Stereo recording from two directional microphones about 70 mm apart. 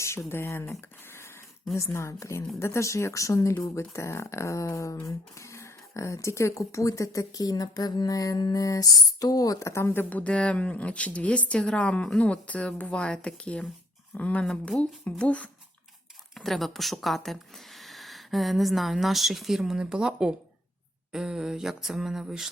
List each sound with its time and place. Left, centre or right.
0.0 s speech: left
9.9 s speech: left
16.3 s a woman's voice: centre
21.1 s a sound: centre